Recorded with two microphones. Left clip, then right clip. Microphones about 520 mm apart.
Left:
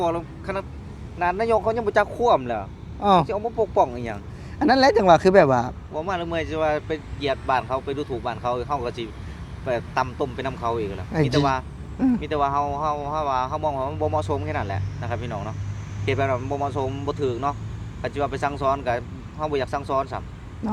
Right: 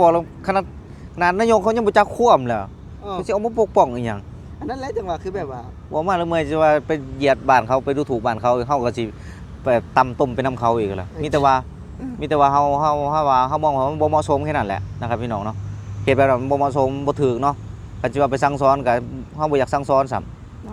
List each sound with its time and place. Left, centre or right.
0.0 s speech: right
1.2 s speech: right
3.0 s speech: left
3.2 s speech: right
4.6 s speech: left
5.9 s speech: right